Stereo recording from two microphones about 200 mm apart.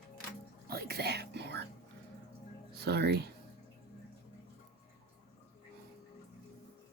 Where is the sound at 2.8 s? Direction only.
55° right (ahead or behind).